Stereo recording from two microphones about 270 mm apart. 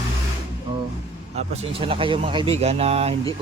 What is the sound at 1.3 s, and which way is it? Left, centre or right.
Speech, right.